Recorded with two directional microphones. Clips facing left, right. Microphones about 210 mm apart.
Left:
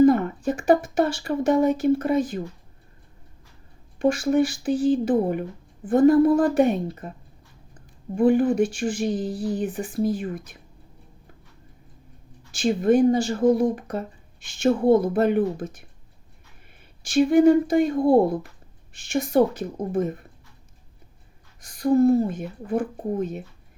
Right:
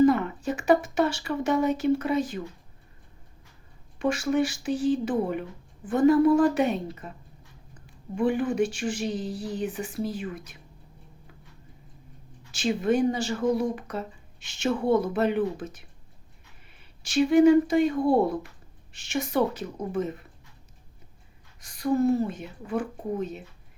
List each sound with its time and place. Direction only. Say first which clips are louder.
0.0 s speech: left 4 dB; 45° left (ahead or behind)
3.9 s speech: left 4 dB; 50° left (ahead or behind)
8.1 s speech: left 6 dB; 45° left (ahead or behind)
12.5 s speech: left 5 dB; 50° left (ahead or behind)
17.0 s speech: left 2 dB; 50° left (ahead or behind)
18.9 s speech: left 6 dB; 50° left (ahead or behind)
21.6 s a sound: left 4 dB; 50° left (ahead or behind)
21.9 s speech: left 5 dB; 50° left (ahead or behind)